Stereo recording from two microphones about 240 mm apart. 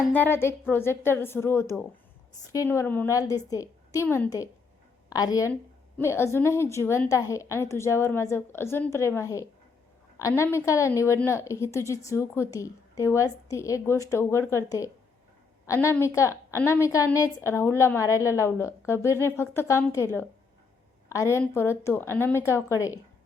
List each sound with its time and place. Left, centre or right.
0.0 s a woman's voice: centre
21.1 s a woman's voice: centre